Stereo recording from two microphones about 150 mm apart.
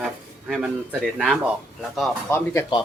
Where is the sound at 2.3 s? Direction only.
15° left (ahead or behind).